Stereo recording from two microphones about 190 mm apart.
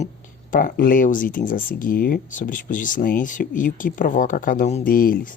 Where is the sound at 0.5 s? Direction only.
45° left (ahead or behind).